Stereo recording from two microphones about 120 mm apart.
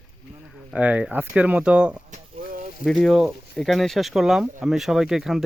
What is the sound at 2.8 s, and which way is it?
Speech, 5° left (ahead or behind).